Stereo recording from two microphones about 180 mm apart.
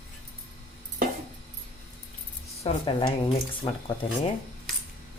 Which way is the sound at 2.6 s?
30° left (ahead or behind).